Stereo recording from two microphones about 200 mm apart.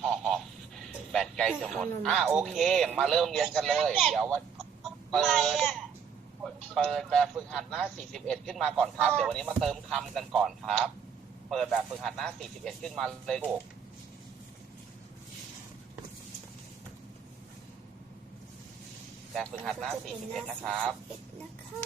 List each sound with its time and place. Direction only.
0.0 s a sound: centre (ahead or behind)
1.1 s a man's voice: 5° left (ahead or behind)
19.3 s a man's voice: 5° left (ahead or behind)